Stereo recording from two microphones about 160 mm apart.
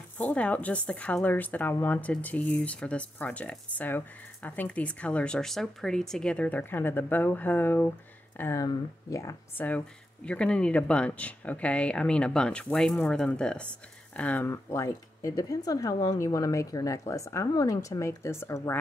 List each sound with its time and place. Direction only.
0.2 s speech: 10° left (ahead or behind)